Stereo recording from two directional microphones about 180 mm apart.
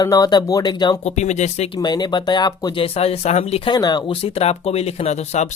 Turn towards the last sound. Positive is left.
turn(degrees=40)  # may be behind; listen again after turning